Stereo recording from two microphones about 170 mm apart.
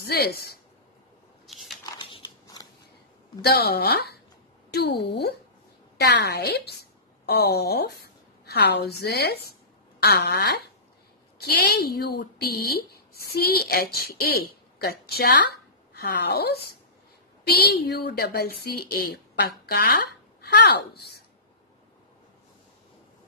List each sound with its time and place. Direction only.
0.0 s speech: 65° left (ahead or behind)
1.5 s a sound: centre (ahead or behind)
2.4 s scissors: 20° left (ahead or behind)
3.4 s a woman's voice: 70° left (ahead or behind)